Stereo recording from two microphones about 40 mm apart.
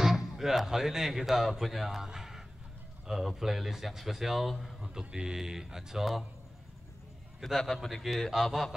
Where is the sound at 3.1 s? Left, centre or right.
Centre.